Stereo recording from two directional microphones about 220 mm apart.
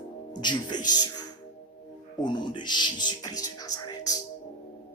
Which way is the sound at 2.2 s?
20° left (ahead or behind).